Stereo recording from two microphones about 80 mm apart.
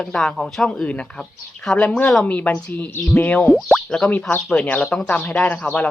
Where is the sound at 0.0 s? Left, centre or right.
Centre.